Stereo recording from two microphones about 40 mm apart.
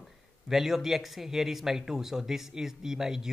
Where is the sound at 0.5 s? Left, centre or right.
Centre.